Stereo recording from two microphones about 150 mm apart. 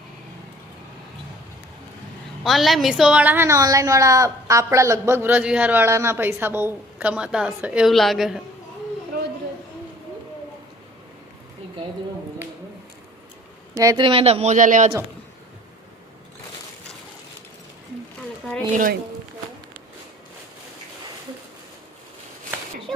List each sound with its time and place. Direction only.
2.4 s a woman's voice: centre (ahead or behind)
13.7 s a woman's voice: 20° right (ahead or behind)
14.0 s speech: 35° right (ahead or behind); by 14.8 s 55° right (ahead or behind)
18.7 s speech: 65° right (ahead or behind)